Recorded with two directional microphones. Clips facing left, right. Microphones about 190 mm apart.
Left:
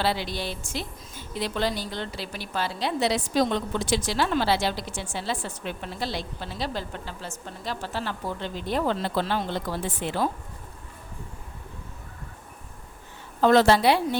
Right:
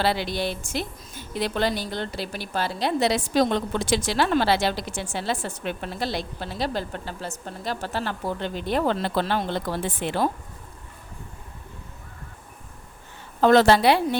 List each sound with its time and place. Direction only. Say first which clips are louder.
0.0 s a woman's voice: right 3 dB; 65° right (ahead or behind); by 2.9 s 45° right (ahead or behind)
3.0 s a woman's voice: right 2 dB; 75° right (ahead or behind)
13.4 s a woman's voice: right 2 dB; 75° right (ahead or behind)